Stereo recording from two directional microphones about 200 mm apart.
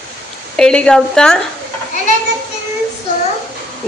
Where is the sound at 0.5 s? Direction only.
5° left (ahead or behind).